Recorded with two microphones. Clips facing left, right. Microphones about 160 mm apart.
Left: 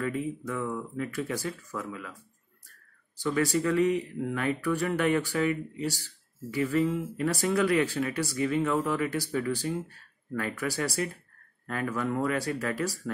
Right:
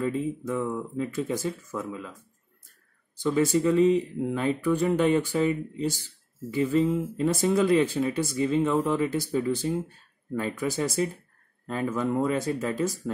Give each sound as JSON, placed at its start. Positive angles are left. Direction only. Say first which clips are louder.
{"t": 0.0, "sound": "speech", "louder": "right 3 dB", "side_deg": -25}
{"t": 3.2, "sound": "speech", "louder": "right 4 dB", "side_deg": -20}